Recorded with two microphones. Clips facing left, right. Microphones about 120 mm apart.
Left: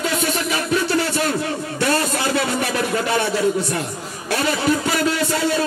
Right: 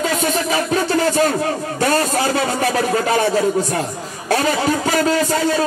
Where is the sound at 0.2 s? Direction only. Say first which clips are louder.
Right 3 dB; 40° right (ahead or behind).